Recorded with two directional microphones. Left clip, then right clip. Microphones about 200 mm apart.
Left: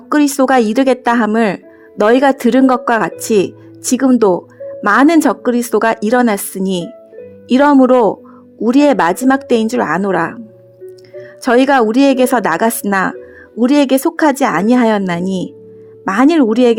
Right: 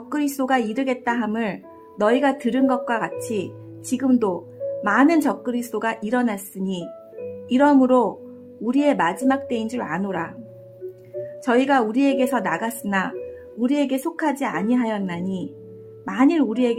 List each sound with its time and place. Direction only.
0.1 s speech: 40° left (ahead or behind)